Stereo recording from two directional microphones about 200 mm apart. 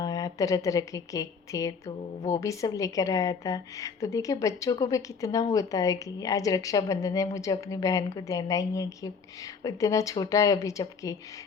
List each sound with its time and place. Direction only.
0.0 s a woman's voice: 15° left (ahead or behind)